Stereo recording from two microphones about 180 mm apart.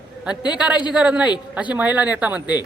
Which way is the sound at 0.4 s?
25° left (ahead or behind).